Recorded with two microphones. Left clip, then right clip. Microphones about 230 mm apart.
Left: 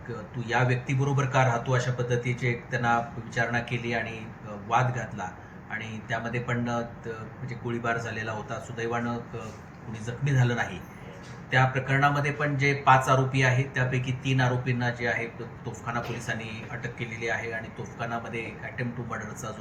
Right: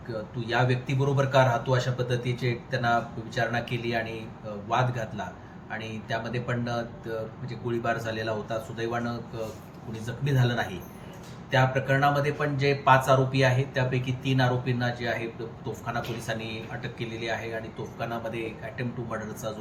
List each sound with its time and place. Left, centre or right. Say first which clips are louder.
0.4 s speech: even; centre
10.2 s speech: even; centre